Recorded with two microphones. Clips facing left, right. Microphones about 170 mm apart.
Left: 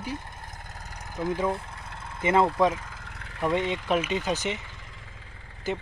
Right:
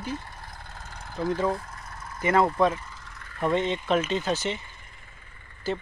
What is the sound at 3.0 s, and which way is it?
Vehicle, 65° left (ahead or behind).